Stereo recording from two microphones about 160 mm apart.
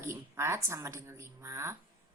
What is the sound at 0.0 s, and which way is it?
A woman's voice, 15° right (ahead or behind).